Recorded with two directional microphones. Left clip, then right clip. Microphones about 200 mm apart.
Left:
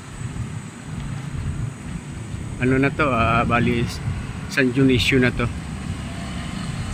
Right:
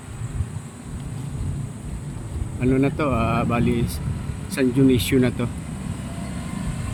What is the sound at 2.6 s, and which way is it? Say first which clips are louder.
Speech: left 2 dB; 10° right (ahead or behind).